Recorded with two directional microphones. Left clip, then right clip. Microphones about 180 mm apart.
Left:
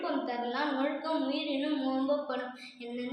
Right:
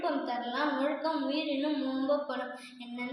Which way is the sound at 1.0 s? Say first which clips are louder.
Right 1 dB; 20° left (ahead or behind).